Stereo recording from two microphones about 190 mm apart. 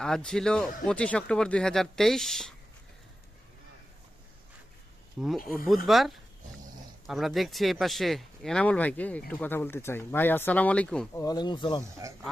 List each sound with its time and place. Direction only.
0.0 s speech: 5° left (ahead or behind)
5.4 s speech: 50° left (ahead or behind)
5.6 s speech: centre (ahead or behind)
11.1 s speech: 20° left (ahead or behind)
11.8 s speech: 15° right (ahead or behind)